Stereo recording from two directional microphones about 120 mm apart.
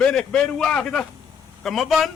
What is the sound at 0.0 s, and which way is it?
A man's voice, 5° left (ahead or behind).